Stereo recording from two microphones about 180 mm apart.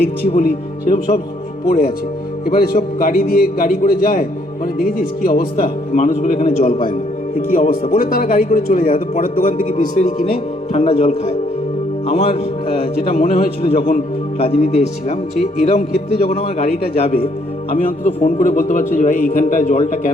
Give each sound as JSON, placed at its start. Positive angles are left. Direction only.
{"t": 0.0, "sound": "a man's voice", "side_deg": 55}
{"t": 8.8, "sound": "speech", "side_deg": 35}
{"t": 9.3, "sound": "a man's voice", "side_deg": 50}
{"t": 10.7, "sound": "speech", "side_deg": 35}
{"t": 13.1, "sound": "a man's voice", "side_deg": 55}
{"t": 13.6, "sound": "speech", "side_deg": 30}
{"t": 17.7, "sound": "a man's voice", "side_deg": 50}